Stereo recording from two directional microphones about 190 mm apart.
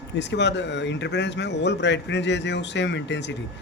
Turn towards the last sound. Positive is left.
turn(degrees=70)  # may be behind; listen again after turning